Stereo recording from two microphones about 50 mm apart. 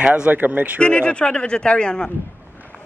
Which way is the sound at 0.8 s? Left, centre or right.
Left.